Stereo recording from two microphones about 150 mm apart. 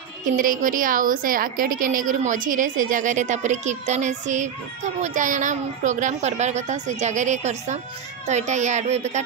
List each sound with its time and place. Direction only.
0.2 s a woman's voice: 65° right (ahead or behind); by 9.2 s 50° right (ahead or behind)